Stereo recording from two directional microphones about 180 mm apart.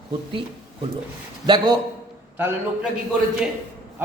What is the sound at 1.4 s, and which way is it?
Speech, 25° right (ahead or behind).